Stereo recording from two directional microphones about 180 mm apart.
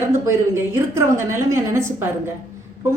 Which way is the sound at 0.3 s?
15° right (ahead or behind).